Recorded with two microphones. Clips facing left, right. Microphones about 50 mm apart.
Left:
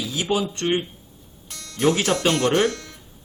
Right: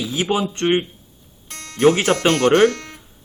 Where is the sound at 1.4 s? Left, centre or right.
Right.